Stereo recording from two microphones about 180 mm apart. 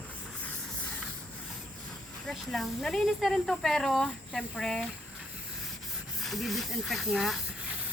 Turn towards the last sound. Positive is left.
turn(degrees=0)  # may be behind; listen again after turning